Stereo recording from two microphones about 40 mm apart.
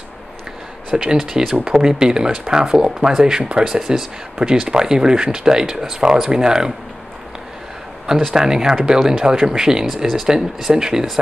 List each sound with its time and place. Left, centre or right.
1.1 s speech: centre
8.4 s speech: centre